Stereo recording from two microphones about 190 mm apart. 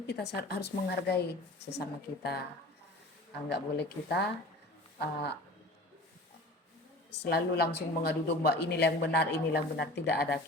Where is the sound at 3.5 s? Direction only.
60° left (ahead or behind).